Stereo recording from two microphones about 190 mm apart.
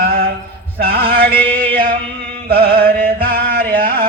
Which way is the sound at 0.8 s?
50° right (ahead or behind).